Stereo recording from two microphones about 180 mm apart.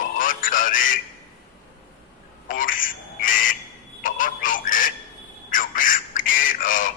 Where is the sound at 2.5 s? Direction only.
50° left (ahead or behind).